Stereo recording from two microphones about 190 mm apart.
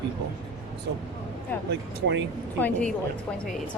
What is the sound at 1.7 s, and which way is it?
Speech, 65° right (ahead or behind).